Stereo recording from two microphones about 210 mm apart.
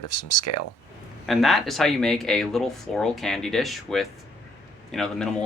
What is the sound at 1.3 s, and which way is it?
Speech, centre (ahead or behind).